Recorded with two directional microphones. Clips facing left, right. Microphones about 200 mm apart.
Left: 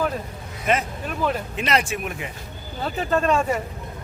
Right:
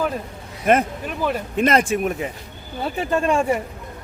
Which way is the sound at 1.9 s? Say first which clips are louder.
Right 7 dB; 40° right (ahead or behind).